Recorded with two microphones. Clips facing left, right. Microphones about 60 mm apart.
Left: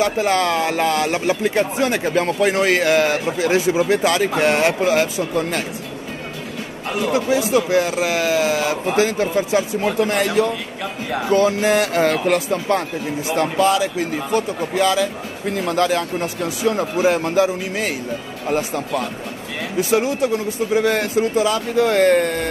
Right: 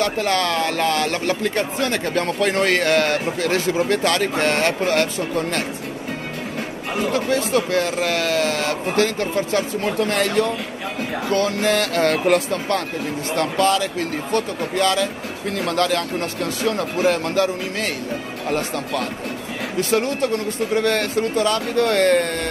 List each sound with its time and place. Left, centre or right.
0.0 s speech: centre
7.1 s speech: centre
11.3 s speech: centre
12.3 s speech: centre